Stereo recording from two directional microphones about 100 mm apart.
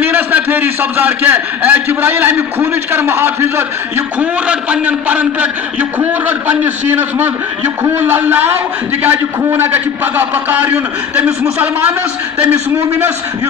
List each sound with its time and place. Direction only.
0.0 s a man's voice: 20° right (ahead or behind)
4.2 s a man's voice: 15° right (ahead or behind)